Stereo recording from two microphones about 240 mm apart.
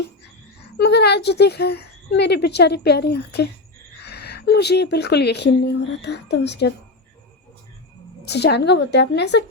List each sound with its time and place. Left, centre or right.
0.8 s speech: left
8.3 s speech: left